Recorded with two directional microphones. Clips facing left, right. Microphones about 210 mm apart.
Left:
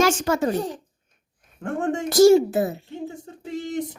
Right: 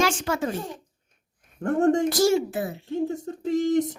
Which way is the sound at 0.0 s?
45° left (ahead or behind).